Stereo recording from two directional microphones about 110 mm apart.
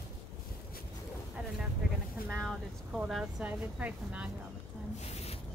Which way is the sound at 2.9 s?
5° right (ahead or behind).